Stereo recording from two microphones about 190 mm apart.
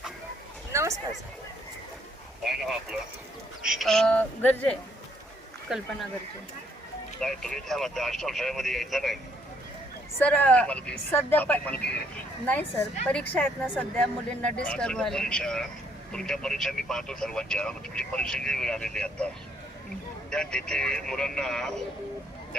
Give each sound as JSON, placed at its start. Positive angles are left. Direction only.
{"t": 0.7, "sound": "a sound", "side_deg": -15}
{"t": 2.4, "sound": "speech", "side_deg": 0}
{"t": 7.2, "sound": "speech", "side_deg": 5}
{"t": 10.2, "sound": "speech", "side_deg": 5}
{"t": 13.1, "sound": "speech", "side_deg": 10}
{"t": 20.3, "sound": "speech", "side_deg": 5}